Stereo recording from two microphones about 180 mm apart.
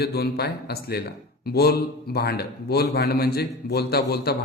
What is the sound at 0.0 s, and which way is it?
Speech, 60° left (ahead or behind).